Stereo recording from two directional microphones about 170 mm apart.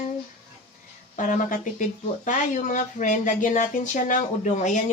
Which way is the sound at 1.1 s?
50° left (ahead or behind).